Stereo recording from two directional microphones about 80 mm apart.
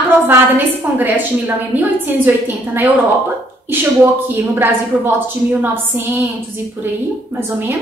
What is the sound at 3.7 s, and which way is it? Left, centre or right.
A woman's voice, right.